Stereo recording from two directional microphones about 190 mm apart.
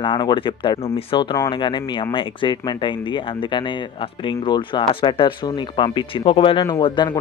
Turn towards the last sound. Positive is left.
turn(degrees=25)  # may be behind; listen again after turning